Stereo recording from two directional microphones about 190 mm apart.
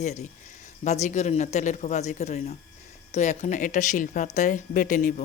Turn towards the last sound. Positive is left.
turn(degrees=45)  # may be behind; listen again after turning